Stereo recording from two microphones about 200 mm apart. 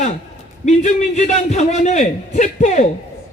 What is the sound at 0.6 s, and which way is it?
A man's voice, 35° left (ahead or behind).